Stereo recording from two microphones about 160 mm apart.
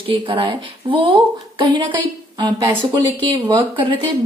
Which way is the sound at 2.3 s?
30° right (ahead or behind).